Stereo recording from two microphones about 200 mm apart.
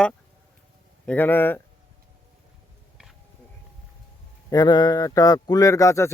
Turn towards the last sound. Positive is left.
turn(degrees=15)  # may be behind; listen again after turning